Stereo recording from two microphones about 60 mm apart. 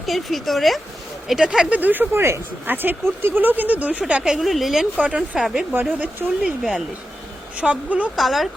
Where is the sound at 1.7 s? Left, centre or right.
Right.